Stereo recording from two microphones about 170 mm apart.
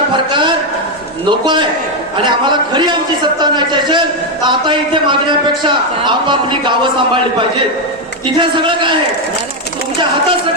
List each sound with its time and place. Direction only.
0.1 s a sound: 30° right (ahead or behind)
2.2 s a man's voice: 30° right (ahead or behind)
8.4 s a man's voice: 30° right (ahead or behind)